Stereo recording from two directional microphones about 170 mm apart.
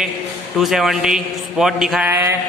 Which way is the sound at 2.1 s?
15° right (ahead or behind).